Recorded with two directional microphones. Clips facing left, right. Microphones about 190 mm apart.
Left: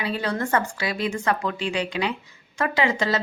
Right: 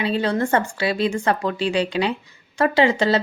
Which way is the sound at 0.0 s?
25° right (ahead or behind).